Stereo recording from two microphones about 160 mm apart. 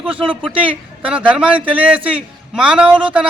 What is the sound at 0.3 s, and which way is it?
A man's voice, 10° right (ahead or behind).